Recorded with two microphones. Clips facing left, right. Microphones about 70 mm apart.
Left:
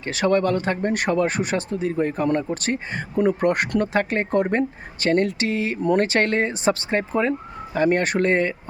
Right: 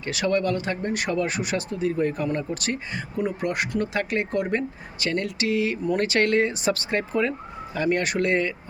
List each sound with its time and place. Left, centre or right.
0.0 s speech: left
3.2 s speech: left